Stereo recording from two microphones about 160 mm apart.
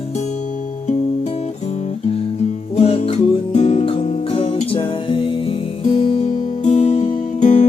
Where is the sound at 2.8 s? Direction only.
40° left (ahead or behind).